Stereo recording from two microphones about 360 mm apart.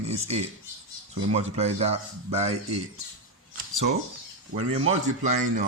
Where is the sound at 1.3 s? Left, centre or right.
Centre.